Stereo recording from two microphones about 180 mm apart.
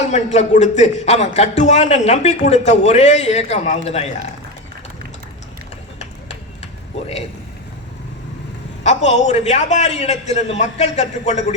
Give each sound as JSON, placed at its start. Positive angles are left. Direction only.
{"t": 0.0, "sound": "a man's voice", "side_deg": 40}
{"t": 8.8, "sound": "a man's voice", "side_deg": 40}